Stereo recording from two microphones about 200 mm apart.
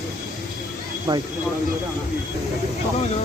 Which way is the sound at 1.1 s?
20° right (ahead or behind).